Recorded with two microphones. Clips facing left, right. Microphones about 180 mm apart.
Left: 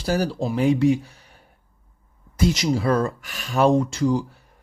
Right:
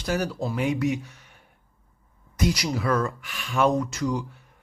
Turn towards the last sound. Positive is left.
turn(degrees=30)  # may be behind; listen again after turning